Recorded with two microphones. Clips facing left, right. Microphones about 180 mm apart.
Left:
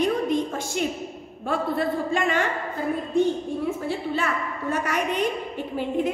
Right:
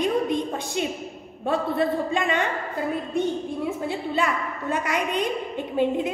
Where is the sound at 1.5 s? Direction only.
20° right (ahead or behind).